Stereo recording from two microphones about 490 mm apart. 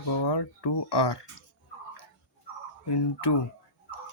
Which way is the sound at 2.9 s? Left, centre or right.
Left.